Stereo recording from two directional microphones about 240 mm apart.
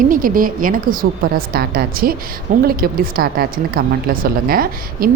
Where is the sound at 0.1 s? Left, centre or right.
Right.